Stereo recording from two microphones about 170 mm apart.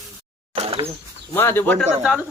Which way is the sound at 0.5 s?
35° right (ahead or behind).